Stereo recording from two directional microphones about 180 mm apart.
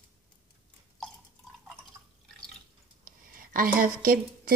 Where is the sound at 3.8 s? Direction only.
50° right (ahead or behind).